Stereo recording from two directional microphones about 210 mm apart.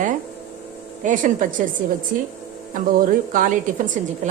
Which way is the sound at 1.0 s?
40° right (ahead or behind).